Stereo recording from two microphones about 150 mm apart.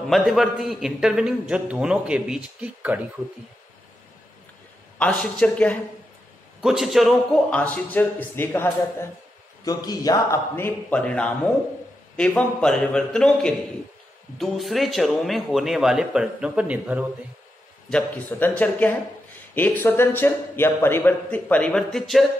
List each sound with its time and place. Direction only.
0.1 s a man's voice: centre (ahead or behind)
4.9 s a man's voice: 10° left (ahead or behind)
9.7 s a man's voice: 25° left (ahead or behind); by 17.0 s 10° right (ahead or behind)
17.8 s a man's voice: 5° left (ahead or behind)